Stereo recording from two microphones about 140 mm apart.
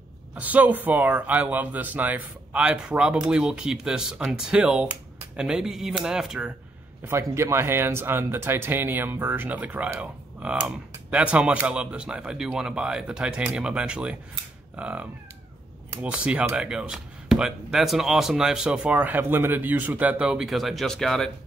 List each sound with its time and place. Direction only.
0.3 s speech: 10° right (ahead or behind)
7.1 s speech: 20° right (ahead or behind); by 21.3 s 5° left (ahead or behind)